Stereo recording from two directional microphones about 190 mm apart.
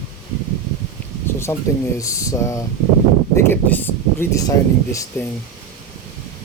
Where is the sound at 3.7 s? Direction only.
10° left (ahead or behind).